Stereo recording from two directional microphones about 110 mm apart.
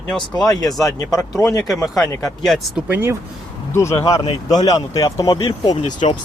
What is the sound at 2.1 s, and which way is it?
Speech, 25° left (ahead or behind).